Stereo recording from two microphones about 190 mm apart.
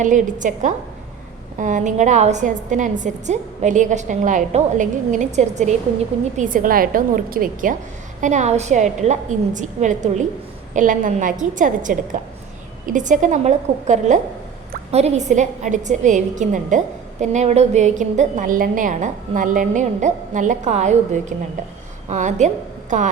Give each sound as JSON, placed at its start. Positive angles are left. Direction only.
{"t": 0.0, "sound": "a woman's voice", "side_deg": -40}